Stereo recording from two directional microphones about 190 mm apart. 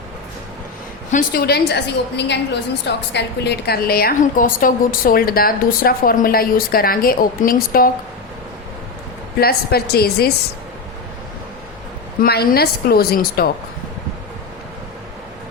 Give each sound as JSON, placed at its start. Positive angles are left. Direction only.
{"t": 1.1, "sound": "a woman's voice", "side_deg": 50}
{"t": 9.4, "sound": "a woman's voice", "side_deg": 55}
{"t": 12.2, "sound": "a woman's voice", "side_deg": 50}